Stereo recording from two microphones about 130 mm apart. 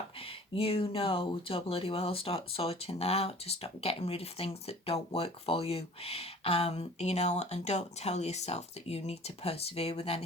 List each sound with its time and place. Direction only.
0.2 s speech: 45° left (ahead or behind)